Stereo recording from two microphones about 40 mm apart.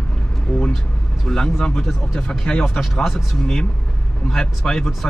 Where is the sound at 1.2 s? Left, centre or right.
Centre.